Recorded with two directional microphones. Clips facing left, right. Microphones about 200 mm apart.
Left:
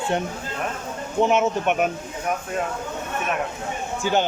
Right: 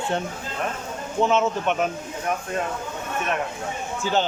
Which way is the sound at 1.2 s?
15° left (ahead or behind).